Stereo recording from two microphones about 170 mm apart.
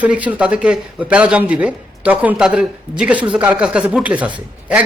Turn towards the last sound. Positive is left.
turn(degrees=-10)  # may be behind; listen again after turning